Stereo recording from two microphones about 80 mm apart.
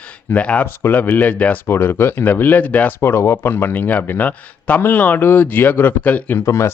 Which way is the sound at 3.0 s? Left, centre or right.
Left.